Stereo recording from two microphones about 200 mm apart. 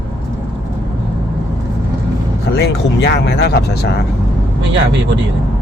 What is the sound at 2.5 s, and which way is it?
Speech, 55° left (ahead or behind).